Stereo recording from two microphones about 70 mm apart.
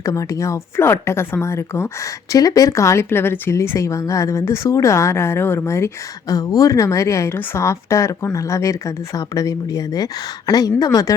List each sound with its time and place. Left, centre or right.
0.0 s speech: left
0.8 s speech: left
2.3 s speech: left
6.2 s a woman's voice: left